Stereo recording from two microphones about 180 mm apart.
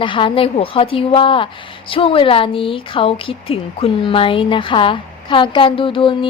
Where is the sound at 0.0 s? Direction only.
30° left (ahead or behind).